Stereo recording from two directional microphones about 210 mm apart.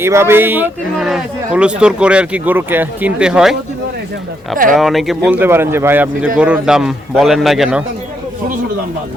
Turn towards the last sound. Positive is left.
turn(degrees=-5)  # may be behind; listen again after turning